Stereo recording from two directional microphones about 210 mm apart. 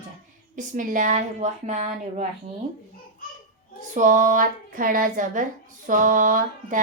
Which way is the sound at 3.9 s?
35° right (ahead or behind).